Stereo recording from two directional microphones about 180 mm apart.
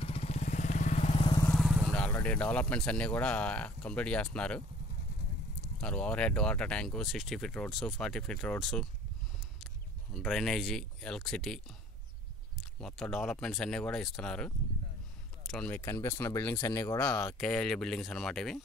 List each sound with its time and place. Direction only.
0.0 s vehicle: 35° left (ahead or behind)
1.4 s speech: centre (ahead or behind)
10.1 s speech: centre (ahead or behind)
12.8 s speech: 5° left (ahead or behind); by 17.4 s 20° left (ahead or behind)
17.4 s speech: centre (ahead or behind)